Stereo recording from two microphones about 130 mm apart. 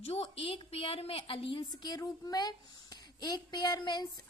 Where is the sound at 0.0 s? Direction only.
50° left (ahead or behind).